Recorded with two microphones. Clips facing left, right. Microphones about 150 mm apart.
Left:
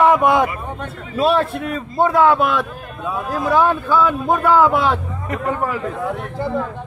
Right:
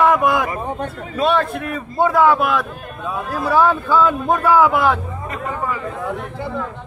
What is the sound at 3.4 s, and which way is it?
Speech, 15° left (ahead or behind).